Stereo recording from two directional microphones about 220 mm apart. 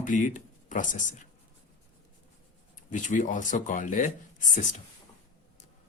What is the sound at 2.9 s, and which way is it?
Speech, 35° left (ahead or behind).